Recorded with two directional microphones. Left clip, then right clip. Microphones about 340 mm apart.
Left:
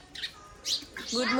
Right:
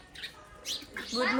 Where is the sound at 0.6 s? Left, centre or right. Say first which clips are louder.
Left 4 dB; centre.